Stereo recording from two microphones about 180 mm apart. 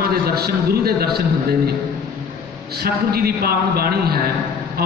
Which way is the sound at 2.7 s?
60° right (ahead or behind).